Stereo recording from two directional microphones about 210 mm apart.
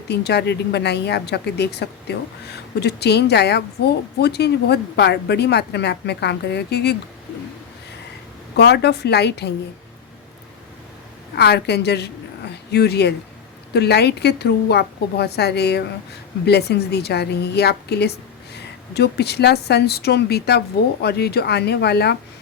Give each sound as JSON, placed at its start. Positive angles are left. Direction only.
{"t": 0.1, "sound": "speech", "side_deg": 50}
{"t": 8.5, "sound": "speech", "side_deg": 55}
{"t": 11.3, "sound": "a woman's voice", "side_deg": 50}